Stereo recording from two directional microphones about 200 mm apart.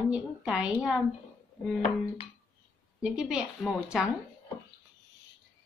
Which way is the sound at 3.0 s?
5° right (ahead or behind).